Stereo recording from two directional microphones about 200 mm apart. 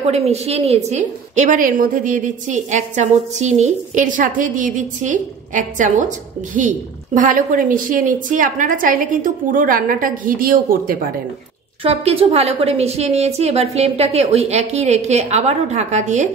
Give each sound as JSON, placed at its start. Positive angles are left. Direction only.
{"t": 0.1, "sound": "a woman's voice", "side_deg": -30}
{"t": 11.8, "sound": "a woman's voice", "side_deg": -30}